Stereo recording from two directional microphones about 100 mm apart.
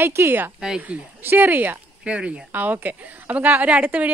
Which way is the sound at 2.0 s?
10° right (ahead or behind).